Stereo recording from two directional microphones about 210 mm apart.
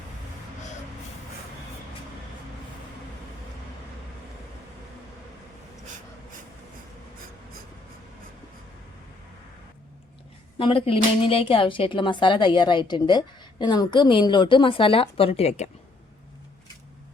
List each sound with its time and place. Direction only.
10.6 s speech: 25° left (ahead or behind)